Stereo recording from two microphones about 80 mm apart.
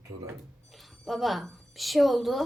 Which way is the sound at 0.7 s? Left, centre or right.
Centre.